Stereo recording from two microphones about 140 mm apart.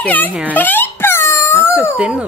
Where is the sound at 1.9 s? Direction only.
5° right (ahead or behind).